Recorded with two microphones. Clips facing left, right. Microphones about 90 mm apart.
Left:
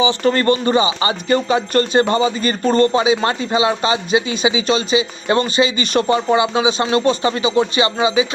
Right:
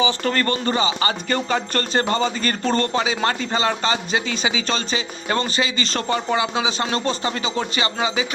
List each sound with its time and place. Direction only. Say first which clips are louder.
0.0 s a man's voice: left 5 dB; 20° left (ahead or behind)